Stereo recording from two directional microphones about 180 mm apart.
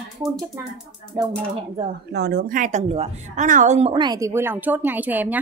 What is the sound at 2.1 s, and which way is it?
A woman's voice, 65° right (ahead or behind).